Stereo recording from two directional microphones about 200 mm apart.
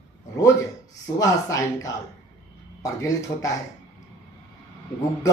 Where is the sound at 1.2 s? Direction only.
15° left (ahead or behind).